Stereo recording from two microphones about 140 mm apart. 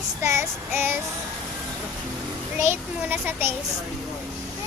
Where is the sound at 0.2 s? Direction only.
20° right (ahead or behind).